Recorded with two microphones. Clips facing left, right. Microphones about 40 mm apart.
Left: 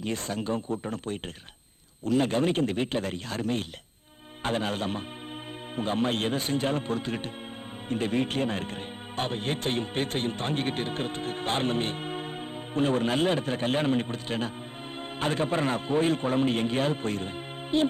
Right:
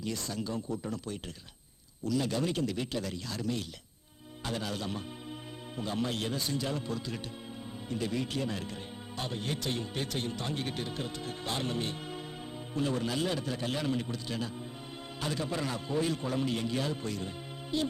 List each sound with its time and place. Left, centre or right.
0.0 s speech: left